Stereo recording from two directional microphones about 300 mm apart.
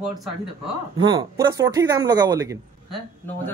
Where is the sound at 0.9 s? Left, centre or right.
Centre.